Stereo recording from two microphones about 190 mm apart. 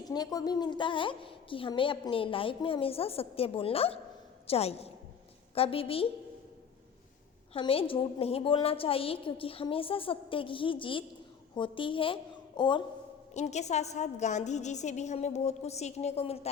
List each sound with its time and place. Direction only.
0.0 s a woman's voice: 20° left (ahead or behind)
7.5 s a woman's voice: 30° left (ahead or behind)
13.3 s a woman's voice: 35° left (ahead or behind)